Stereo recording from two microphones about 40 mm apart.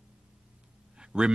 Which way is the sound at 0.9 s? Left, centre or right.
Right.